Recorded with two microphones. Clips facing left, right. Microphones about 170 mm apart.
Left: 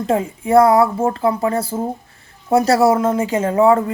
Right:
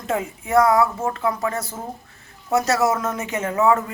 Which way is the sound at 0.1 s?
30° left (ahead or behind).